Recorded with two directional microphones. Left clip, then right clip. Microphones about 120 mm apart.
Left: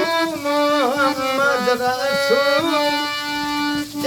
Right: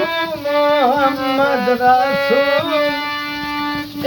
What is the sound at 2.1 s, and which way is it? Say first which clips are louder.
Music: right 2 dB; 20° right (ahead or behind).